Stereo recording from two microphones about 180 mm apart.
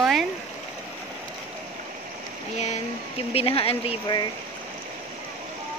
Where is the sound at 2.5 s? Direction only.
40° left (ahead or behind); by 4.3 s 25° left (ahead or behind).